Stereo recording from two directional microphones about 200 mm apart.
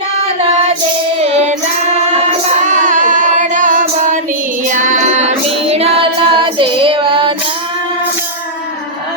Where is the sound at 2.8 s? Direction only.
40° right (ahead or behind).